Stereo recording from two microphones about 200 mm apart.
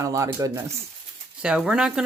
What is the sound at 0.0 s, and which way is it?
Speech, 15° right (ahead or behind).